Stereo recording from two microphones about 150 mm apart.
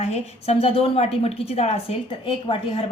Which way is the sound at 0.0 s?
45° left (ahead or behind).